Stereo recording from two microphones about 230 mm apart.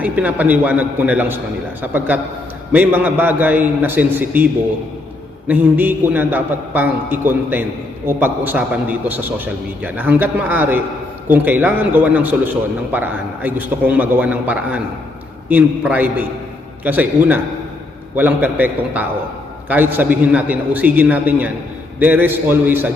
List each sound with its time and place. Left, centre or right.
0.0 s a man's voice: centre
5.5 s a man's voice: centre